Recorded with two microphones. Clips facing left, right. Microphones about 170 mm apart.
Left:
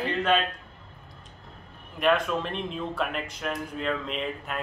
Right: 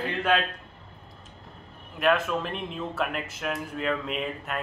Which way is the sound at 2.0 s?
5° right (ahead or behind).